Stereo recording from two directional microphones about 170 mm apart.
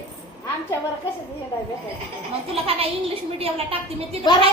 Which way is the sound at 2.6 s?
35° right (ahead or behind).